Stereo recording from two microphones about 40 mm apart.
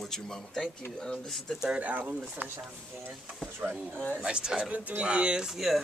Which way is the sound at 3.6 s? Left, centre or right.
Right.